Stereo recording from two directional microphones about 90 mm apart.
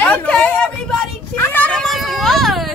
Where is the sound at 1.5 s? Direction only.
15° left (ahead or behind).